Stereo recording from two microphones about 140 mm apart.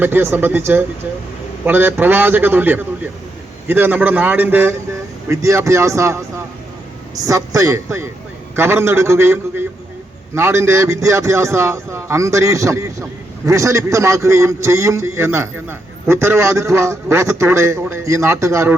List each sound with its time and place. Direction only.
0.0 s a man's voice: 15° right (ahead or behind)
7.3 s a man's voice: 25° right (ahead or behind)